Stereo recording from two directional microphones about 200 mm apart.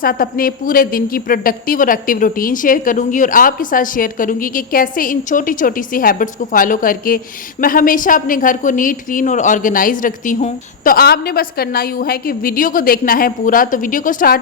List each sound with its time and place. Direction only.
0.0 s a woman's voice: 45° left (ahead or behind)